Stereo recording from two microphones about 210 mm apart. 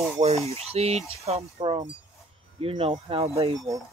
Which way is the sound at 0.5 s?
30° right (ahead or behind).